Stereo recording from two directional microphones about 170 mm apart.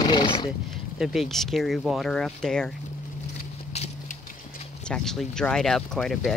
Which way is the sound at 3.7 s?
40° left (ahead or behind).